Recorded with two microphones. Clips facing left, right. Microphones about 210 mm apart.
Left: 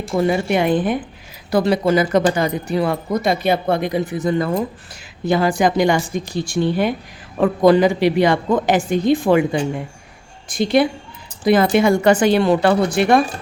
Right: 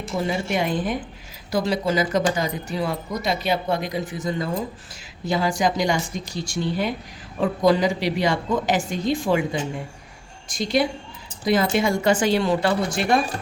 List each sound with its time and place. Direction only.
0.2 s speech: 60° left (ahead or behind)